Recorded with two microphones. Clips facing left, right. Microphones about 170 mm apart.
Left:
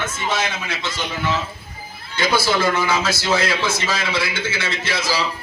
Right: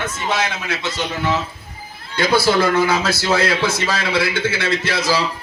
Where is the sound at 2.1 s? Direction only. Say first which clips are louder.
Right 4 dB; 55° right (ahead or behind).